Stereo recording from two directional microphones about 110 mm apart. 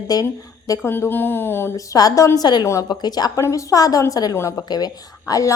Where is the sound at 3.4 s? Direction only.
30° left (ahead or behind).